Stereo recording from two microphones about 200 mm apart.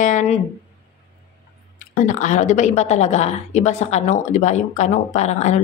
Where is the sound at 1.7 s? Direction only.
40° left (ahead or behind).